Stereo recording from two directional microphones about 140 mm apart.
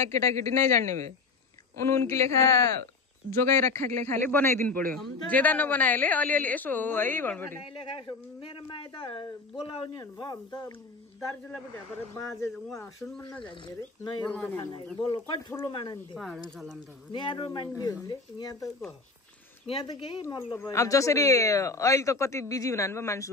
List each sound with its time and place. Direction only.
0.1 s a man's voice: 20° left (ahead or behind)
3.8 s speech: 60° right (ahead or behind)
4.1 s a man's voice: 15° left (ahead or behind)
7.6 s speech: 40° left (ahead or behind)
12.7 s speech: 20° left (ahead or behind)
13.2 s speech: 35° left (ahead or behind)
14.3 s a man's voice: 10° left (ahead or behind)
15.0 s speech: 30° left (ahead or behind)
16.4 s speech: centre (ahead or behind)
17.1 s speech: 35° left (ahead or behind)
19.6 s speech: 40° left (ahead or behind)
19.9 s speech: 30° left (ahead or behind)
20.5 s speech: 20° left (ahead or behind)